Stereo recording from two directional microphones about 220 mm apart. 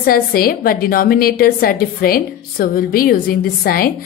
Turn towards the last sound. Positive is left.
turn(degrees=40)  # may be behind; listen again after turning